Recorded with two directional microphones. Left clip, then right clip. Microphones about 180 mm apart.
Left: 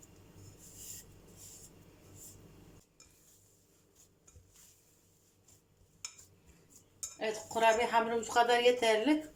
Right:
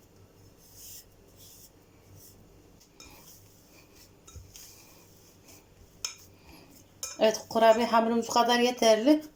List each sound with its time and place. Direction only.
7.2 s speech: 40° right (ahead or behind)